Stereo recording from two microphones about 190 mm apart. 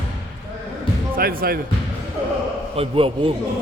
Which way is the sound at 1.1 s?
50° right (ahead or behind).